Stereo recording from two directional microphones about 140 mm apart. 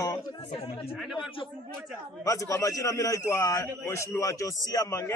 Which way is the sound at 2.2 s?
25° left (ahead or behind).